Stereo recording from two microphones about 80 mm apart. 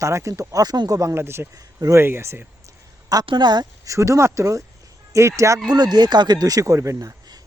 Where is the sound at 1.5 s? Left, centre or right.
Right.